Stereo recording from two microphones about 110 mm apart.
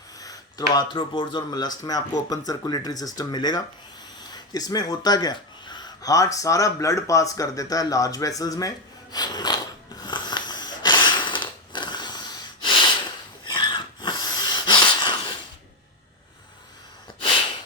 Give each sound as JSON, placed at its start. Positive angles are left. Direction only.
{"t": 0.2, "sound": "speech", "side_deg": 35}
{"t": 9.1, "sound": "a sound", "side_deg": 40}
{"t": 13.4, "sound": "snort", "side_deg": 45}